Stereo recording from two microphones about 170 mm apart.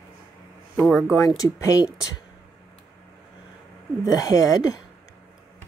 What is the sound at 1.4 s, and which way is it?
Speech, 20° left (ahead or behind).